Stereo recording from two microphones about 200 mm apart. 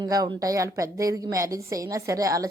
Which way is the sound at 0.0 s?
20° right (ahead or behind).